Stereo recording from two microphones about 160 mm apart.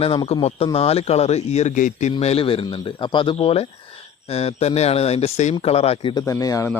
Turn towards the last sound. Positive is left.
turn(degrees=20)  # may be behind; listen again after turning